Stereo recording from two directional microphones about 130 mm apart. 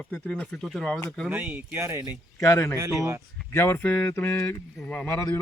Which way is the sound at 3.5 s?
15° left (ahead or behind).